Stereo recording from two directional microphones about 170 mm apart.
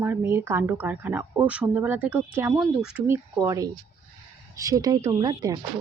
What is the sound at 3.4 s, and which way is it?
Speech, 20° right (ahead or behind).